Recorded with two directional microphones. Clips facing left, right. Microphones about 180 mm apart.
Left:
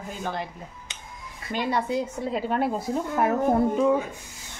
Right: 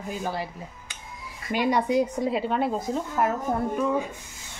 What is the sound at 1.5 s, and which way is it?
Speech, 15° right (ahead or behind).